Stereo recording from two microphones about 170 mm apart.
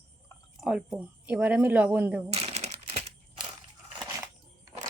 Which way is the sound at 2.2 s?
35° right (ahead or behind).